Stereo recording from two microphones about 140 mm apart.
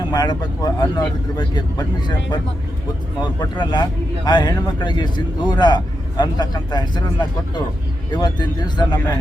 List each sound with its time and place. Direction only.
0.1 s speech: 30° left (ahead or behind)
3.4 s speech: 35° left (ahead or behind)